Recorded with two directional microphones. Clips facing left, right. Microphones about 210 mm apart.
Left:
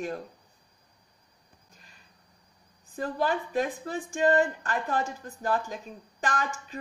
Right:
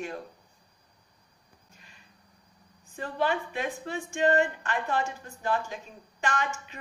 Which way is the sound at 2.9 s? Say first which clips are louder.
Left 1 dB; 35° left (ahead or behind).